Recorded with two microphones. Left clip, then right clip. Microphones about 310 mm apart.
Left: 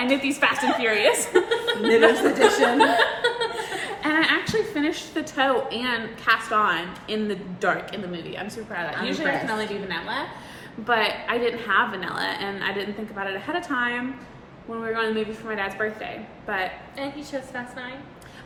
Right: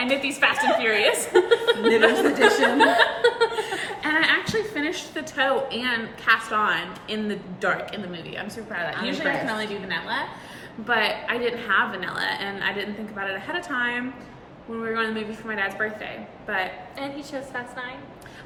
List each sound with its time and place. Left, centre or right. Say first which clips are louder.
0.0 s a woman's voice: even; centre
1.5 s a woman's voice: right 4 dB; centre
2.0 s a woman's voice: left 4 dB; centre
3.2 s chuckle: right 3 dB; centre
3.6 s a woman's voice: right 1 dB; centre
17.0 s a woman's voice: left 1 dB; centre